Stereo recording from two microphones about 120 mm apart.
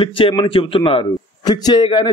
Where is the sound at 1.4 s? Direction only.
35° left (ahead or behind).